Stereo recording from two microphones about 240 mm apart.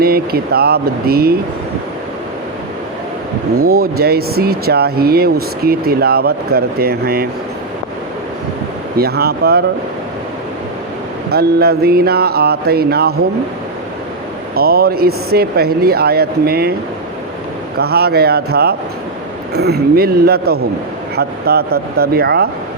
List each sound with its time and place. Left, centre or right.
0.0 s speech: right
3.7 s speech: right
9.0 s speech: right
11.3 s speech: right
14.5 s speech: right
17.7 s speech: right